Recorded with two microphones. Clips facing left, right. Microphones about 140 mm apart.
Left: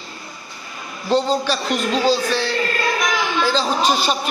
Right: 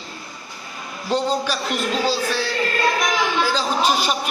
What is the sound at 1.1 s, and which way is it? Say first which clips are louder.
Music: left 3 dB; 10° right (ahead or behind).